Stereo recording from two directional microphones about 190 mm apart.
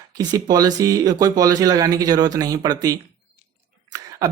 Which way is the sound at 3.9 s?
20° right (ahead or behind).